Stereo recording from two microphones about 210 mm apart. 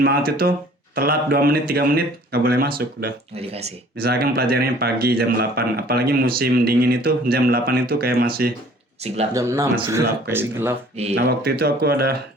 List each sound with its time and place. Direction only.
0.3 s a man's voice: 45° right (ahead or behind)
3.3 s speech: 30° right (ahead or behind)
4.0 s a man's voice: 50° right (ahead or behind)
9.3 s speech: 15° right (ahead or behind)
11.1 s a man's voice: 50° right (ahead or behind)